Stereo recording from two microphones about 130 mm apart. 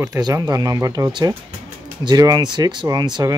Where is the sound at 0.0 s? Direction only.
25° right (ahead or behind).